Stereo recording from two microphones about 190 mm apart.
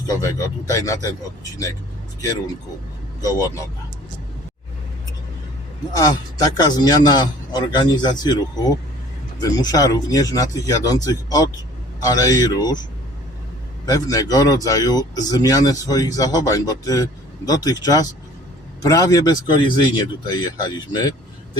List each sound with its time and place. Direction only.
0.1 s speech: 15° left (ahead or behind)
3.2 s a man's voice: 20° left (ahead or behind)
6.0 s a man's voice: 20° left (ahead or behind)
9.4 s a man's voice: 20° left (ahead or behind)
13.8 s a man's voice: 20° left (ahead or behind)